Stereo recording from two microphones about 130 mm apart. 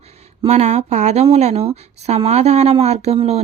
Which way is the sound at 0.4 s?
55° right (ahead or behind).